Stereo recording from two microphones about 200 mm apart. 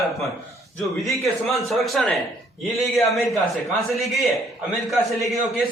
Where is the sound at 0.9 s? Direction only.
Centre (ahead or behind).